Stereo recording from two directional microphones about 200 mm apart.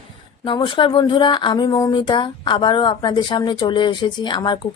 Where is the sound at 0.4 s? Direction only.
25° left (ahead or behind).